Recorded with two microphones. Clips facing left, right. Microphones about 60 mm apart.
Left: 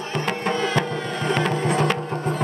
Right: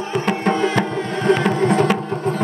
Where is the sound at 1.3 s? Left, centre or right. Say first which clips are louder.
Right 6 dB; centre.